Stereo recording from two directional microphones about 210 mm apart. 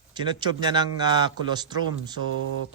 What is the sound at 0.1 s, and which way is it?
A man's voice, 20° right (ahead or behind).